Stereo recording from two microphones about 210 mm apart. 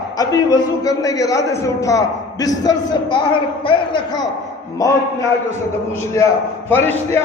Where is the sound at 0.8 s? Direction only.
15° left (ahead or behind).